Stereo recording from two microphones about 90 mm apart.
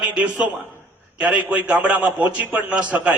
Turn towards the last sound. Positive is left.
turn(degrees=-15)  # may be behind; listen again after turning